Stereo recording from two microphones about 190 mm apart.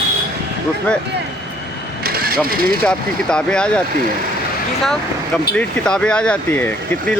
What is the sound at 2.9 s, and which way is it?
Speech, 5° left (ahead or behind).